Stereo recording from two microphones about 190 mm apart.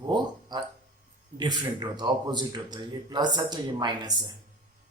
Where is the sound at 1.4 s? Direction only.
20° right (ahead or behind).